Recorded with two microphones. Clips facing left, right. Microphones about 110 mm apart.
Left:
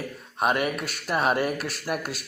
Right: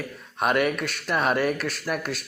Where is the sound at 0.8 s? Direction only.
5° left (ahead or behind).